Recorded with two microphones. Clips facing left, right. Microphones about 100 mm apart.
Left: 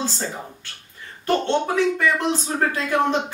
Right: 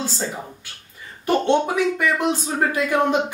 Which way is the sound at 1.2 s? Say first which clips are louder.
Right 2 dB; 15° right (ahead or behind).